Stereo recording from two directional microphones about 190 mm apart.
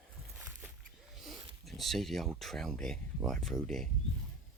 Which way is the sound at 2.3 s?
Centre (ahead or behind).